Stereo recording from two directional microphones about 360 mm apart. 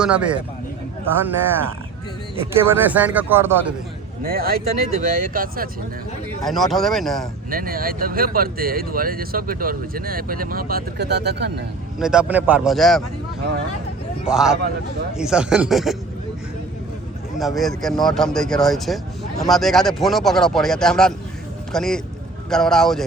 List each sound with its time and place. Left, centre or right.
0.0 s speech: centre
4.2 s speech: right
6.4 s speech: centre
7.5 s speech: right
11.9 s speech: centre
14.3 s speech: centre
17.3 s speech: centre